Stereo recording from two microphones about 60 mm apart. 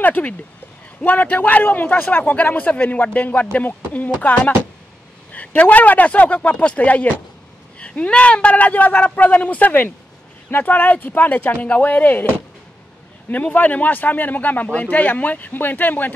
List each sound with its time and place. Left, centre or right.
0.0 s speech: left
13.3 s speech: left